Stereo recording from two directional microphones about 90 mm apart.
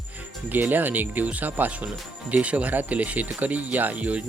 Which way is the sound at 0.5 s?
20° right (ahead or behind).